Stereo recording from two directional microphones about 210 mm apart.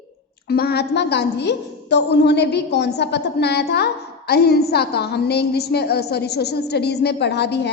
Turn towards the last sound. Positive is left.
turn(degrees=55)  # may be behind; listen again after turning